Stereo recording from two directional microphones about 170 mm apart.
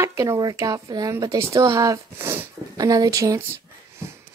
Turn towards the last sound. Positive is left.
turn(degrees=-20)  # may be behind; listen again after turning